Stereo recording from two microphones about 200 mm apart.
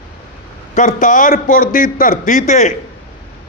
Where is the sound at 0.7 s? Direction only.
40° left (ahead or behind).